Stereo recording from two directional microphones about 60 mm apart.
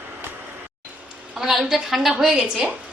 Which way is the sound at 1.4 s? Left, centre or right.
Centre.